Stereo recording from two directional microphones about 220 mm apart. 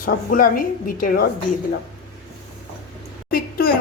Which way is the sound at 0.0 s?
40° left (ahead or behind).